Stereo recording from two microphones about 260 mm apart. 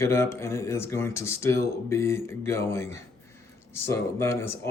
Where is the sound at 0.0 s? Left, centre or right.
Centre.